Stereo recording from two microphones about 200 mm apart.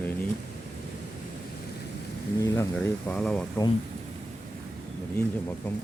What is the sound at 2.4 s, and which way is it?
Speech, 15° left (ahead or behind).